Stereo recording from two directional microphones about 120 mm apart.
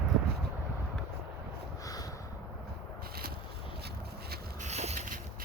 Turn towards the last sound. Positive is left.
turn(degrees=-65)  # may be behind; listen again after turning